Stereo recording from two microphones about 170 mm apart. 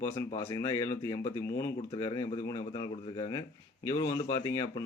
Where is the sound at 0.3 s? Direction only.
15° left (ahead or behind).